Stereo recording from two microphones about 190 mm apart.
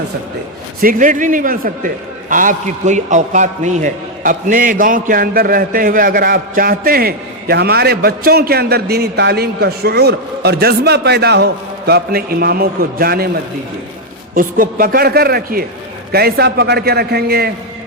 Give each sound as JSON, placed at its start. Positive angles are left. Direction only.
{"t": 0.8, "sound": "a man's voice", "side_deg": -45}
{"t": 14.3, "sound": "a man's voice", "side_deg": -45}